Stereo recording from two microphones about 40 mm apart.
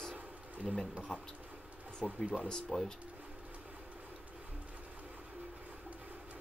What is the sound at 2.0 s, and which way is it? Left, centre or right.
Speech, centre.